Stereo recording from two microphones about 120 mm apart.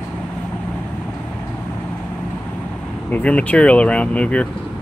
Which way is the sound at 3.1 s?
10° left (ahead or behind).